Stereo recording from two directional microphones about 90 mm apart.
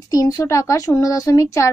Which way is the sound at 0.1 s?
40° left (ahead or behind).